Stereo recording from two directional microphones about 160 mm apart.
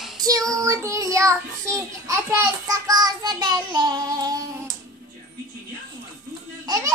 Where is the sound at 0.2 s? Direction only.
20° right (ahead or behind).